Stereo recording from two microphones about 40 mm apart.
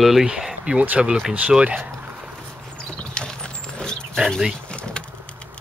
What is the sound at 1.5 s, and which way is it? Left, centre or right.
Speech, centre.